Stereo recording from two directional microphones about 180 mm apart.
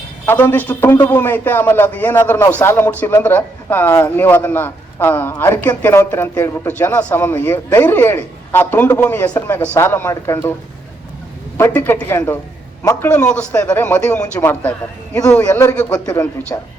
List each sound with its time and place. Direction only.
0.3 s a man's voice: 10° left (ahead or behind)
11.5 s a man's voice: 10° left (ahead or behind)